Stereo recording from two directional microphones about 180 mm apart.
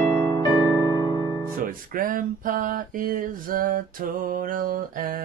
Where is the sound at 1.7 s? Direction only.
50° right (ahead or behind).